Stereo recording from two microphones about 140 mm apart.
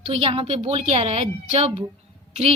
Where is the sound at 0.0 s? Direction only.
45° right (ahead or behind).